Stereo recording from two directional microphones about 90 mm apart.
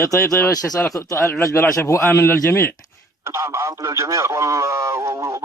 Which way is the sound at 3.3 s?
30° right (ahead or behind).